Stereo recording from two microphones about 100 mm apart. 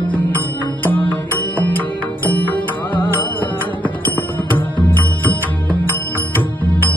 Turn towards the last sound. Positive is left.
turn(degrees=15)  # may be behind; listen again after turning